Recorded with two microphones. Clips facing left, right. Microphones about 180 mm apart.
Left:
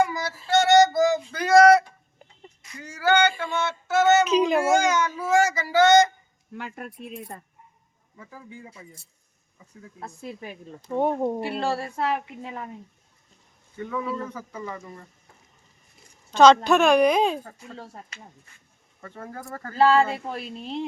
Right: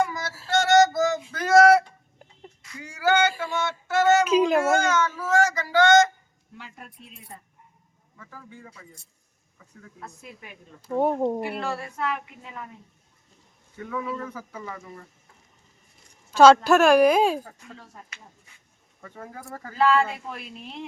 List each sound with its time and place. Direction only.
0.0 s female singing: centre (ahead or behind)
2.8 s a sound: 10° right (ahead or behind)
4.6 s a sound: 10° left (ahead or behind)
6.5 s speech: 55° left (ahead or behind)
8.2 s speech: 15° left (ahead or behind)
10.2 s a woman's voice: 30° left (ahead or behind)
10.8 s speech: 5° right (ahead or behind)
11.3 s a woman's voice: 30° left (ahead or behind)
13.7 s speech: centre (ahead or behind)
16.3 s a woman's voice: 5° right (ahead or behind)
17.7 s a woman's voice: 35° left (ahead or behind)
19.0 s speech: 5° right (ahead or behind)
19.7 s a woman's voice: 35° left (ahead or behind)